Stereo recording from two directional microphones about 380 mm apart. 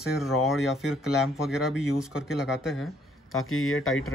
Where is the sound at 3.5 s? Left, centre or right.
Left.